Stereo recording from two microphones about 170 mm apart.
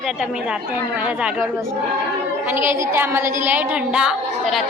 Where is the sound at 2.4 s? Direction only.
15° right (ahead or behind).